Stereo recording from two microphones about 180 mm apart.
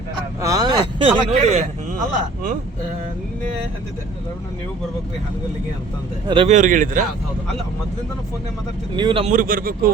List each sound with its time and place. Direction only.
0.4 s speech: 20° right (ahead or behind); by 2.0 s 35° right (ahead or behind)
6.2 s speech: 25° right (ahead or behind)
6.5 s a man's voice: 45° right (ahead or behind)
9.0 s speech: 30° right (ahead or behind)
9.3 s a man's voice: 50° right (ahead or behind)